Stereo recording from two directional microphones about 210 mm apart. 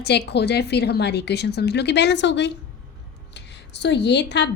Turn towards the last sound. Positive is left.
turn(degrees=55)  # may be behind; listen again after turning